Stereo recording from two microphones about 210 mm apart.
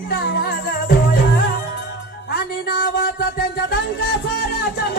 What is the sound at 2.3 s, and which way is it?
Speech, 45° left (ahead or behind).